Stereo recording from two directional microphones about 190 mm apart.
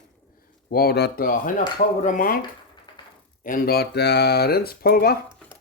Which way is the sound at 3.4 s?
50° left (ahead or behind).